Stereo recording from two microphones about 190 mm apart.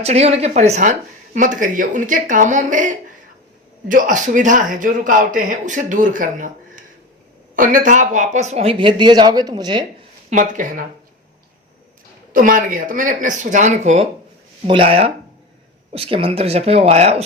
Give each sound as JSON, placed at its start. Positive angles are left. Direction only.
{"t": 0.0, "sound": "speech", "side_deg": -35}
{"t": 10.2, "sound": "speech", "side_deg": -40}
{"t": 12.3, "sound": "speech", "side_deg": -45}